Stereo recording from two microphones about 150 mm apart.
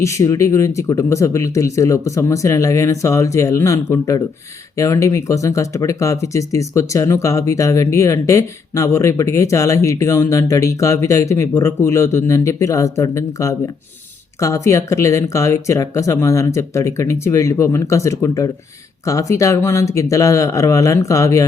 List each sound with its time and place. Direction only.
0.0 s speech: 20° left (ahead or behind)